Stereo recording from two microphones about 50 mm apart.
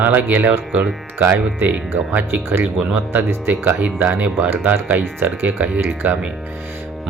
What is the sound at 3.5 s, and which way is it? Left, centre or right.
Speech, right.